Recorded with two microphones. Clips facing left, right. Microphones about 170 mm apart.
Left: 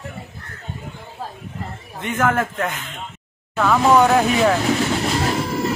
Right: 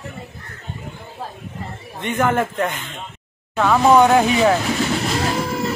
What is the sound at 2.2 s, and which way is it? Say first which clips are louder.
Speech: even; centre (ahead or behind).